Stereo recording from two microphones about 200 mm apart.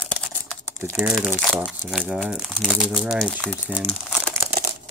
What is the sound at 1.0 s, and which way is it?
Speech, 10° right (ahead or behind).